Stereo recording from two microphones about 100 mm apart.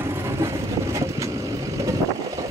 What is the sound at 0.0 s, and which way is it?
Vehicle, 25° right (ahead or behind).